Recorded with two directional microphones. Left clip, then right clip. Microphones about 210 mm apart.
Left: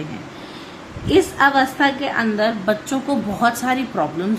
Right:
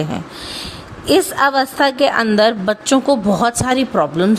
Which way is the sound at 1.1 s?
50° right (ahead or behind).